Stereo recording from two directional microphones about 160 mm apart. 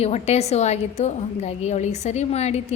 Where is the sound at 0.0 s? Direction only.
45° left (ahead or behind).